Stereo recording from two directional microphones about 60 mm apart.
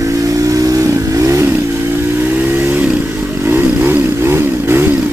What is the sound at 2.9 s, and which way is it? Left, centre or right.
Motorcycle, right.